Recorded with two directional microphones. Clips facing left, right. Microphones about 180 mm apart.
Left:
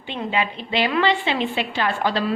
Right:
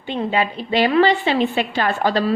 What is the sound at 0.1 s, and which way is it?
A woman's voice, 40° right (ahead or behind).